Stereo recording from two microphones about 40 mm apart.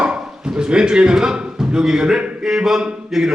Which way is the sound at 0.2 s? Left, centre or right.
Centre.